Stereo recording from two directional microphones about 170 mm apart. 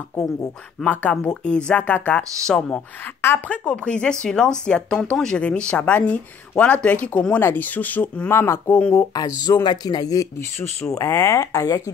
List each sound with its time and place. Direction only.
0.1 s speech: 15° left (ahead or behind)
9.1 s speech: 25° left (ahead or behind)